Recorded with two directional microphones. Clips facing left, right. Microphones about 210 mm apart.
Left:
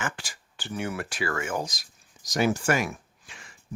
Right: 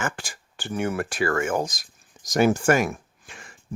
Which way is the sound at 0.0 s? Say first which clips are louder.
Right 4 dB; 50° right (ahead or behind).